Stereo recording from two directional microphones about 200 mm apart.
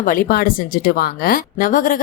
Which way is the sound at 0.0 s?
45° left (ahead or behind).